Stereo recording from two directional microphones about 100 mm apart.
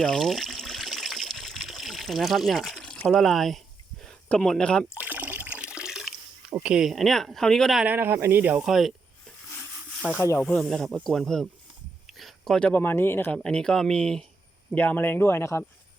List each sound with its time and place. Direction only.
0.0 s trickle: centre (ahead or behind)
3.1 s speech: centre (ahead or behind)
4.9 s water: 15° right (ahead or behind)
6.6 s speech: 10° right (ahead or behind)
7.9 s speech: 20° right (ahead or behind)
8.6 s speech: centre (ahead or behind)
10.2 s speech: 25° left (ahead or behind)
10.6 s speech: 5° left (ahead or behind)
12.0 s a sound: centre (ahead or behind)
12.5 s speech: 15° left (ahead or behind)
13.4 s speech: 10° left (ahead or behind)
14.8 s speech: 20° left (ahead or behind)